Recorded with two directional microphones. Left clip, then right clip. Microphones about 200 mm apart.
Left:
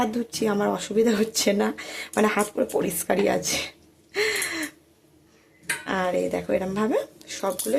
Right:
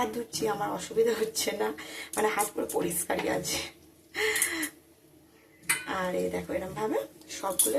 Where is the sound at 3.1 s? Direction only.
40° left (ahead or behind).